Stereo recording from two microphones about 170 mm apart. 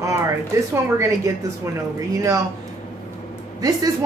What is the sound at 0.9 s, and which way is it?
Speech, 20° right (ahead or behind).